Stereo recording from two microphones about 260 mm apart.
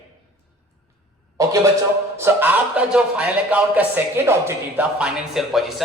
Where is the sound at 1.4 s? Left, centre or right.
Centre.